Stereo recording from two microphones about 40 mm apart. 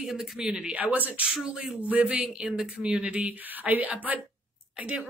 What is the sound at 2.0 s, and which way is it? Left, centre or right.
Speech, right.